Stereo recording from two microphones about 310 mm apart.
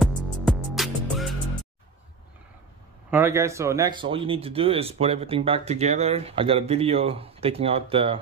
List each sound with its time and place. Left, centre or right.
0.0 s music: centre
3.1 s speech: centre